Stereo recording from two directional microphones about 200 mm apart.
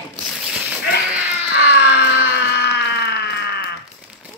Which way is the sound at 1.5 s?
65° left (ahead or behind).